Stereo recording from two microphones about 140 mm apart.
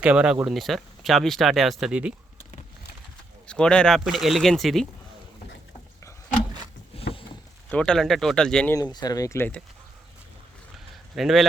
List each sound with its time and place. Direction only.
0.0 s speech: 5° right (ahead or behind)
3.4 s speech: 5° left (ahead or behind)
6.9 s boat: 40° left (ahead or behind)
7.7 s speech: 5° left (ahead or behind)
8.7 s speech: 30° left (ahead or behind)
11.1 s speech: centre (ahead or behind)